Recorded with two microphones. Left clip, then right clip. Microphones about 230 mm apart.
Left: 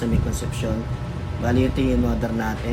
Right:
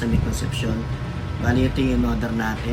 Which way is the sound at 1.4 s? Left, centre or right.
Centre.